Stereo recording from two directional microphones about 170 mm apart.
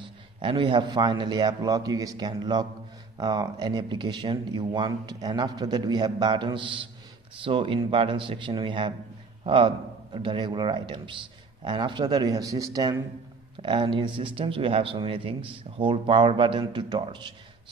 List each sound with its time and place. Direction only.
0.0 s speech: 30° right (ahead or behind)